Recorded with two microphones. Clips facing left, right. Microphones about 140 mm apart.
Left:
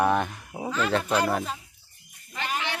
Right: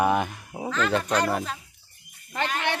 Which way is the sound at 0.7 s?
5° left (ahead or behind).